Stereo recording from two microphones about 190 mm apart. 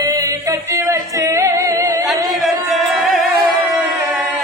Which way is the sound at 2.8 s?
Centre (ahead or behind).